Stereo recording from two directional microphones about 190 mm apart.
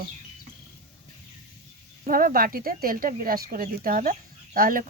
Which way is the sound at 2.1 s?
45° right (ahead or behind).